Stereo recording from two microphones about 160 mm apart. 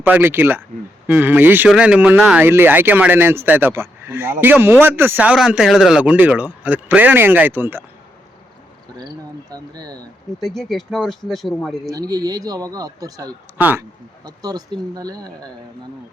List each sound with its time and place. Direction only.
0.0 s speech: 10° right (ahead or behind)
9.0 s a sound: 25° right (ahead or behind)
10.4 s speech: centre (ahead or behind)
11.9 s speech: 25° right (ahead or behind)
13.6 s speech: 10° right (ahead or behind)
14.3 s speech: 25° right (ahead or behind)